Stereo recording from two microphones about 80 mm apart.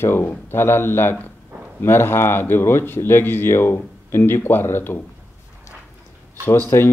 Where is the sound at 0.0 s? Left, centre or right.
Left.